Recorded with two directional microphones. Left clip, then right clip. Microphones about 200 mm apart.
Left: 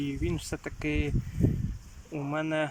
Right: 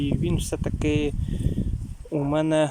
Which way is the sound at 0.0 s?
15° right (ahead or behind).